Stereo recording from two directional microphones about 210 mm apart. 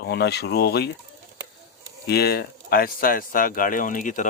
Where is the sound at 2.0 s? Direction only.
50° left (ahead or behind).